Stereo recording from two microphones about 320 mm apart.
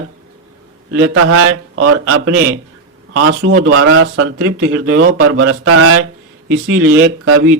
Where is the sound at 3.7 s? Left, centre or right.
Right.